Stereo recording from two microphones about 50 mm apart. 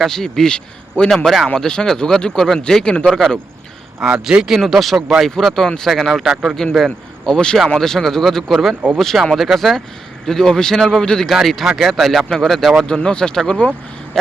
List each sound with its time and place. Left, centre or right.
0.0 s speech: centre
1.1 s speech: centre
1.5 s speech: centre
4.0 s speech: centre
5.9 s speech: centre
7.3 s speech: centre
11.3 s speech: centre
12.9 s speech: centre